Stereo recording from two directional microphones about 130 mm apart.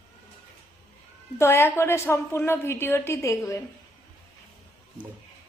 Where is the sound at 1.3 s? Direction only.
20° left (ahead or behind).